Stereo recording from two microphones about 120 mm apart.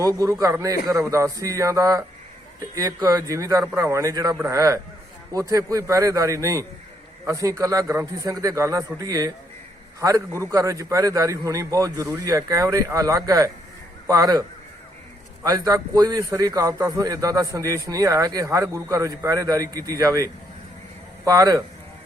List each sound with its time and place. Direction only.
0.0 s a man's voice: 30° right (ahead or behind)
15.4 s a man's voice: 35° right (ahead or behind)